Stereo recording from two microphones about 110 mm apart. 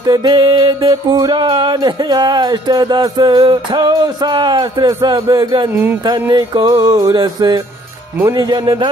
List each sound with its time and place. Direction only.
0.0 s speech: 40° right (ahead or behind)